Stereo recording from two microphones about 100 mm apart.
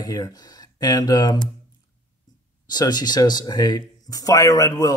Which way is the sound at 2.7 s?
45° left (ahead or behind).